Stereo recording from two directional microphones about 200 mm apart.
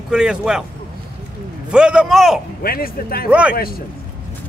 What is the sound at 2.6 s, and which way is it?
Speech, 50° left (ahead or behind).